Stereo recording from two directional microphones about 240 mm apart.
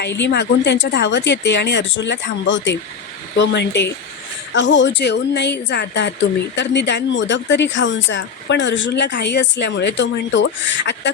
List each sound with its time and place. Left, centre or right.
0.0 s speech: left